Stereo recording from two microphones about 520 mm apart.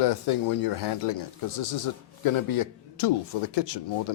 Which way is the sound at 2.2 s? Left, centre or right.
Left.